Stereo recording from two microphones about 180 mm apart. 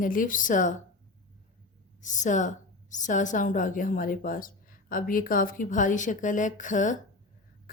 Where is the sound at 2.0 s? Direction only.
45° left (ahead or behind).